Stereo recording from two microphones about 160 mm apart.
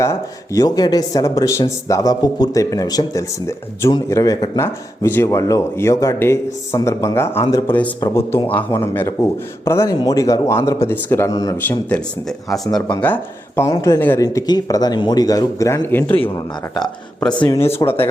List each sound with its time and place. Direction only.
0.0 s speech: 20° left (ahead or behind)
13.6 s speech: 20° left (ahead or behind)